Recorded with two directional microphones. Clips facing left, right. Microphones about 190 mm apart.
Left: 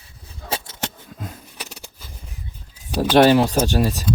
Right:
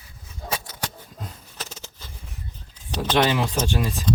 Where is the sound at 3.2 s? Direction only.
40° left (ahead or behind).